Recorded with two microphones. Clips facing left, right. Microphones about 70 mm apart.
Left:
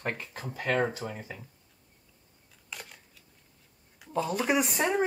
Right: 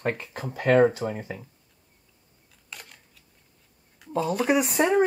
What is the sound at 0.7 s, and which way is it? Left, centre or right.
Speech, right.